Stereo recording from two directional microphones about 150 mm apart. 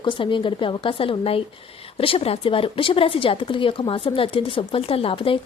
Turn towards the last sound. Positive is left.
turn(degrees=35)  # may be behind; listen again after turning